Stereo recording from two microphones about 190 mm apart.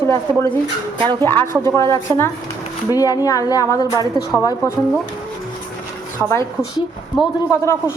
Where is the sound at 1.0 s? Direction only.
25° right (ahead or behind).